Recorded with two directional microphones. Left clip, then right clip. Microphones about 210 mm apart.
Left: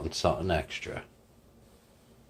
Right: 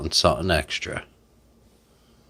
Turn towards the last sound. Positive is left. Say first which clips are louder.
# right 7 dB
turn(degrees=-40)  # may be behind; listen again after turning